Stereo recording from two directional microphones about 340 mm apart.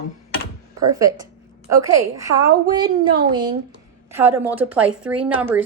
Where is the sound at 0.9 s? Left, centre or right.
Centre.